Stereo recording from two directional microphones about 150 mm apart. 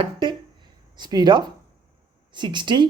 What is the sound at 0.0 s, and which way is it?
Speech, 35° right (ahead or behind).